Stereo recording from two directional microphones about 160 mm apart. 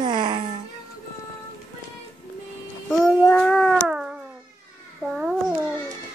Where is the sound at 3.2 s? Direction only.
5° left (ahead or behind).